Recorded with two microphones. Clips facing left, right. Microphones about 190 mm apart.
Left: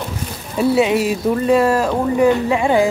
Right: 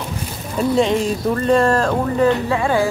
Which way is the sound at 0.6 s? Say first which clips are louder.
Left 2 dB; 10° left (ahead or behind).